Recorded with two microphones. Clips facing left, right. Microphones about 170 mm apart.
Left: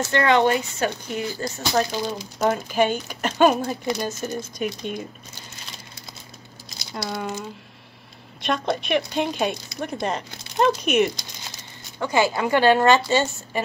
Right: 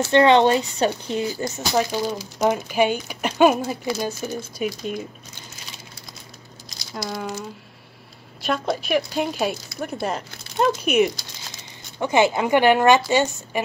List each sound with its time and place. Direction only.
0.0 s speech: 20° right (ahead or behind)
1.6 s speech: 5° right (ahead or behind)
6.9 s speech: centre (ahead or behind)
8.4 s speech: 5° right (ahead or behind)
12.0 s speech: 20° right (ahead or behind)